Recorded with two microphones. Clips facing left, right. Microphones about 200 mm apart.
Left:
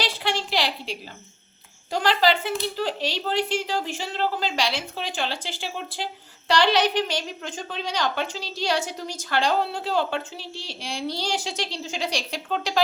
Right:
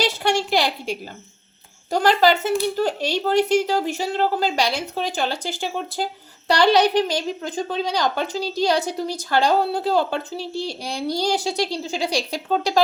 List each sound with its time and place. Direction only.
0.0 s a woman's voice: 45° right (ahead or behind)